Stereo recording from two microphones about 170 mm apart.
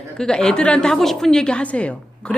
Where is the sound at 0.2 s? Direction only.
5° left (ahead or behind).